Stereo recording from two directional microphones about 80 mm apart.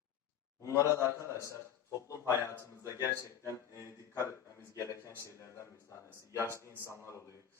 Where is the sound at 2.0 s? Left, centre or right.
Left.